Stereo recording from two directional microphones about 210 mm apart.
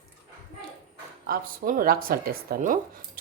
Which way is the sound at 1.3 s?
40° right (ahead or behind).